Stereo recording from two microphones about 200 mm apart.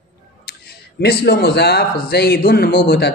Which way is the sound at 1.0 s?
55° left (ahead or behind).